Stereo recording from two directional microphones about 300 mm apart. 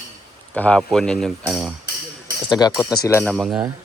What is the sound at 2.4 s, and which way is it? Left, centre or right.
Speech, centre.